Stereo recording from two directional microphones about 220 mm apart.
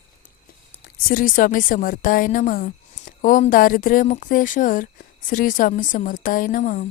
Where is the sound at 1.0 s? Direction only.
40° left (ahead or behind).